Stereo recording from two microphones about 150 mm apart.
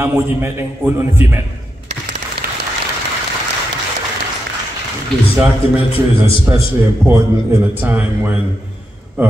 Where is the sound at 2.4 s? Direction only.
90° right.